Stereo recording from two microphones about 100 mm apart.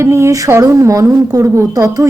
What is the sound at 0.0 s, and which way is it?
Speech, 30° right (ahead or behind).